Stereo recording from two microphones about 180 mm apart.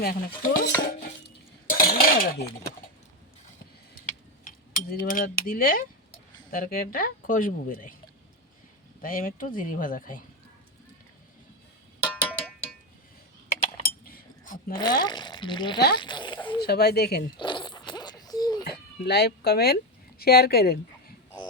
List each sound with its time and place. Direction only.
0.0 s dishes: 55° left (ahead or behind)
0.9 s dishes: 70° left (ahead or behind)
1.7 s a sound: 50° left (ahead or behind)
4.0 s a sound: 50° left (ahead or behind)
5.0 s speech: 50° left (ahead or behind)
9.0 s speech: 50° left (ahead or behind)
12.0 s cowbell: 10° left (ahead or behind)
13.5 s chink: 55° left (ahead or behind)
14.7 s speech: 25° left (ahead or behind)
16.6 s dishes: 60° left (ahead or behind)
17.3 s zipper: 25° left (ahead or behind)
18.6 s speech: 65° left (ahead or behind)